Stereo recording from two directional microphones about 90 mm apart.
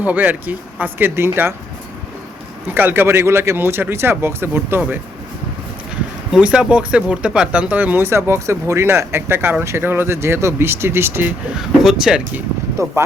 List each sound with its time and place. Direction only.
0.0 s speech: 20° right (ahead or behind)
2.6 s speech: 20° right (ahead or behind)
6.4 s speech: 10° right (ahead or behind)
11.5 s speech: 5° right (ahead or behind)
12.8 s speech: 35° right (ahead or behind)